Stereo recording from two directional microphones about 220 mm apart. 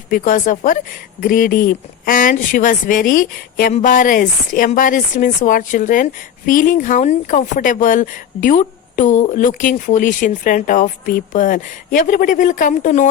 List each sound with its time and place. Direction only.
0.1 s speech: 35° left (ahead or behind)